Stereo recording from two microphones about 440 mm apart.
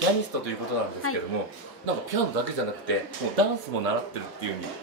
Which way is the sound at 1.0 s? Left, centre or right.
Left.